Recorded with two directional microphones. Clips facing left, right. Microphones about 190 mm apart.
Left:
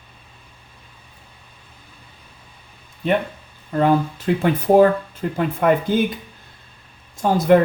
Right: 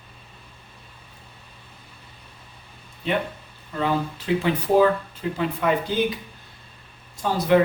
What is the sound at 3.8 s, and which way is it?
Speech, 50° left (ahead or behind).